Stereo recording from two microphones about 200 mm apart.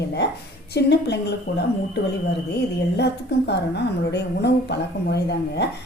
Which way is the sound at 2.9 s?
55° left (ahead or behind).